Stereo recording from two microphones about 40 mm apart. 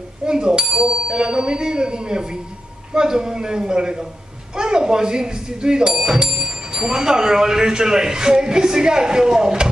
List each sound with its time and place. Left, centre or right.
0.2 s speech: centre